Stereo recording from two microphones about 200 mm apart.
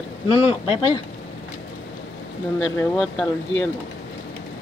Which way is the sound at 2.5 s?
Centre (ahead or behind).